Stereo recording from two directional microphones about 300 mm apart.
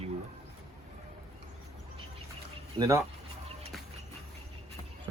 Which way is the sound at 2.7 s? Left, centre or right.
Centre.